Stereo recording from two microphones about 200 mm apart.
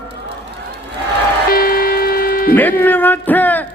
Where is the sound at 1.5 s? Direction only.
50° left (ahead or behind).